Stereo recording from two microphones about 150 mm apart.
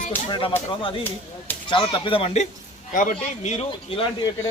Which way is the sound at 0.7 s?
35° left (ahead or behind).